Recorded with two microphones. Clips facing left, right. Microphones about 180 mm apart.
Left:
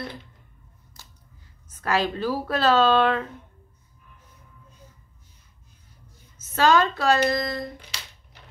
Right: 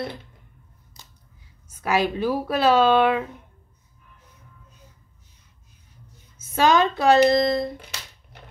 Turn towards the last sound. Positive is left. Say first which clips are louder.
# right 7 dB
turn(degrees=-25)  # may be behind; listen again after turning